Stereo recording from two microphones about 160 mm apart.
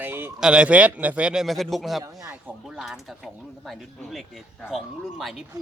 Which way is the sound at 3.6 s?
Centre (ahead or behind).